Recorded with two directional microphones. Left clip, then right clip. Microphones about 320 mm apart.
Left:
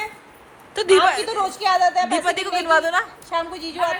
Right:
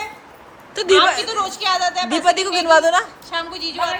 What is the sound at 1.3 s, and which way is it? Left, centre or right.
Speech, left.